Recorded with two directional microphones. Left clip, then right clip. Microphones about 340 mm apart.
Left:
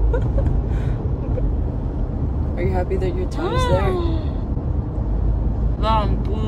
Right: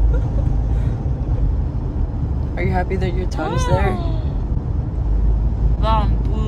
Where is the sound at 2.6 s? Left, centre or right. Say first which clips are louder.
Right 1 dB; right.